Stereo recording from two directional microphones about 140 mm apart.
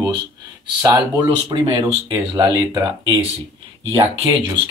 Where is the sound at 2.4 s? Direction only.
30° right (ahead or behind).